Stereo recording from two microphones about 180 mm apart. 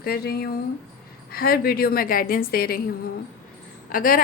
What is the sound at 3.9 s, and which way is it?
Speech, 50° left (ahead or behind).